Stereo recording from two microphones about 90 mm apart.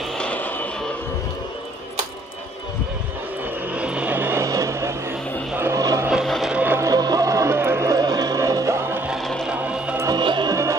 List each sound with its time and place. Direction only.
0.2 s music: 15° left (ahead or behind)
3.7 s vehicle: 15° right (ahead or behind)
4.5 s vehicle: 35° right (ahead or behind)
6.2 s vehicle: centre (ahead or behind)
6.5 s a sound: 20° right (ahead or behind)
6.8 s a sound: 45° right (ahead or behind); by 7.9 s 25° right (ahead or behind)
7.9 s music: 45° right (ahead or behind)
9.2 s music: centre (ahead or behind)
9.5 s music: 15° right (ahead or behind)
10.2 s music: 60° right (ahead or behind)
10.5 s music: 35° right (ahead or behind)